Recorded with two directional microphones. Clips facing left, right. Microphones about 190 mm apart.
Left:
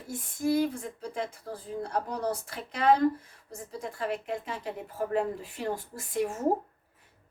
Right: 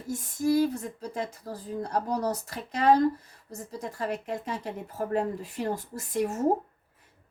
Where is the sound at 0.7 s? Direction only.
40° right (ahead or behind).